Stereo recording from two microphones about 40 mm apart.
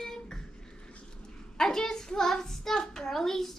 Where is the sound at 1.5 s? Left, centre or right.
Centre.